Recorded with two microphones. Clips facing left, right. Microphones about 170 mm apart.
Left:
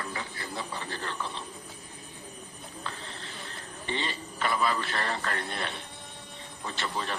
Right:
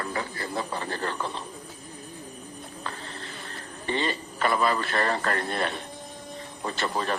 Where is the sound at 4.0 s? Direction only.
45° right (ahead or behind).